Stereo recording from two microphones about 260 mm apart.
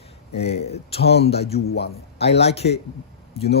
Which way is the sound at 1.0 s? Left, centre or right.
Left.